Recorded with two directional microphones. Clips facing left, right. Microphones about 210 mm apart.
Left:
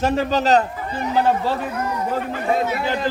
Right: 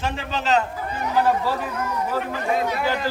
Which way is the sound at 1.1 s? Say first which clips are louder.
Left 1 dB; 25° left (ahead or behind).